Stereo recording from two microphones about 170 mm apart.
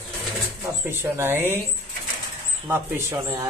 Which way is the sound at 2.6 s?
15° right (ahead or behind).